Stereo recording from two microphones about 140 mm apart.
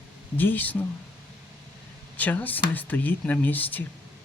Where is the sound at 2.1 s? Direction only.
10° left (ahead or behind).